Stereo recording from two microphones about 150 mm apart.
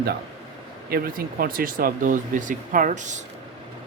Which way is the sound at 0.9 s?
80° right.